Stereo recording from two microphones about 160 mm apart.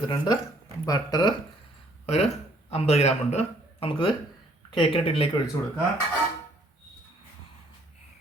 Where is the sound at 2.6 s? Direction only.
40° left (ahead or behind).